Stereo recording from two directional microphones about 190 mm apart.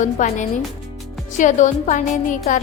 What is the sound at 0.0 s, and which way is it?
Music, 40° left (ahead or behind).